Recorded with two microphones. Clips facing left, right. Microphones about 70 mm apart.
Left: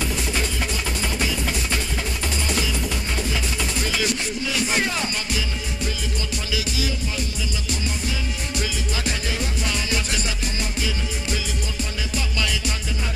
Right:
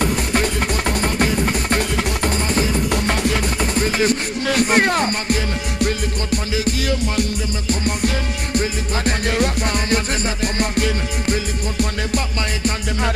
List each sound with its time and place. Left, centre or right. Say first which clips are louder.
0.0 s music: right 7 dB; right
2.9 s music: right 8 dB; right
3.7 s music: right 7 dB; right